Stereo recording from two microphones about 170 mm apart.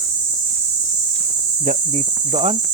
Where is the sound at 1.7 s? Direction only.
45° right (ahead or behind).